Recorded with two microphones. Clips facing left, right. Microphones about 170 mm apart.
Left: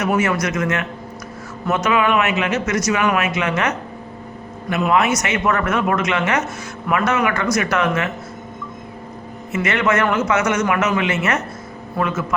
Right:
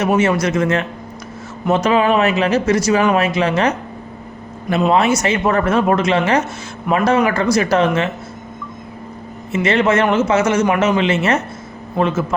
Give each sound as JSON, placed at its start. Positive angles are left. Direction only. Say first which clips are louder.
{"t": 0.0, "sound": "a man's voice", "louder": "right 4 dB", "side_deg": -25}
{"t": 9.5, "sound": "a man's voice", "louder": "right 4 dB", "side_deg": -30}